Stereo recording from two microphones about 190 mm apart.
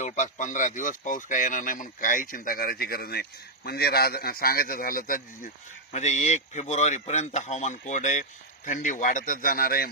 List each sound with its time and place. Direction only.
0.0 s speech: 40° left (ahead or behind)